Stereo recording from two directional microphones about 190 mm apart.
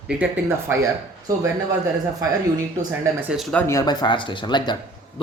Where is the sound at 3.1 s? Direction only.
5° right (ahead or behind).